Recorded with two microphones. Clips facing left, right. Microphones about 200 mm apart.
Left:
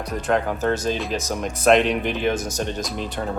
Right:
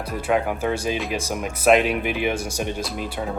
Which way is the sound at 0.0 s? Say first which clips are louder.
Even; 10° right (ahead or behind).